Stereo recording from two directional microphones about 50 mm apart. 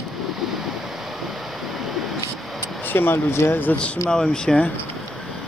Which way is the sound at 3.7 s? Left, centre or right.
Left.